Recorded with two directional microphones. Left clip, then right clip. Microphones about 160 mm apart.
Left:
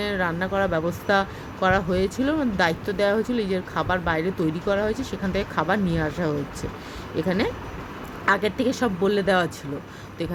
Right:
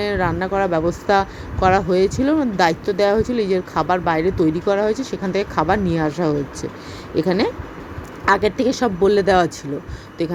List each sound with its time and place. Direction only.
0.0 s speech: 15° right (ahead or behind)